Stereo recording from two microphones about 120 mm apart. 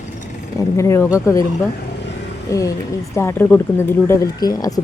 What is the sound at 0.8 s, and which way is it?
Speech, 25° left (ahead or behind).